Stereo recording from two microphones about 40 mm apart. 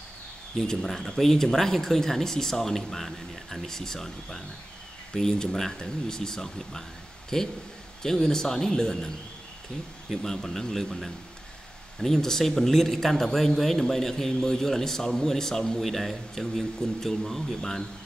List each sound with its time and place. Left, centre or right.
0.6 s speech: centre
10.2 s speech: centre